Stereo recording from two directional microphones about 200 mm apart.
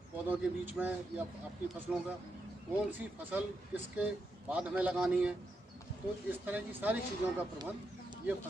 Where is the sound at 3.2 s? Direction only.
5° right (ahead or behind).